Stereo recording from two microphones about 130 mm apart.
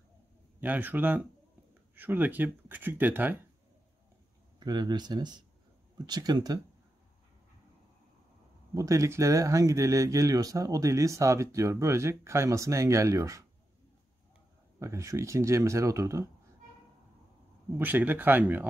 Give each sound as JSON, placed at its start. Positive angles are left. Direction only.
{"t": 0.6, "sound": "speech", "side_deg": -15}
{"t": 4.6, "sound": "speech", "side_deg": -35}
{"t": 8.7, "sound": "speech", "side_deg": -25}
{"t": 14.8, "sound": "speech", "side_deg": -25}
{"t": 17.7, "sound": "speech", "side_deg": -15}